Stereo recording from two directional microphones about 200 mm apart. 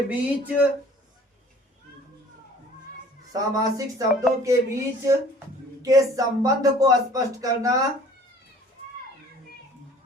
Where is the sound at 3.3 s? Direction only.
15° right (ahead or behind).